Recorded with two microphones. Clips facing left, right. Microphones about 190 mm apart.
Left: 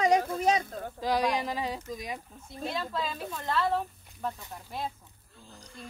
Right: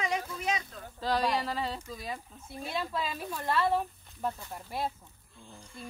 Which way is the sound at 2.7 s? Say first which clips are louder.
Right 1 dB; 10° right (ahead or behind).